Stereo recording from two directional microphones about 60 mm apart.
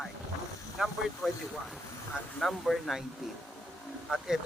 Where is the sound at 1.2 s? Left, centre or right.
Centre.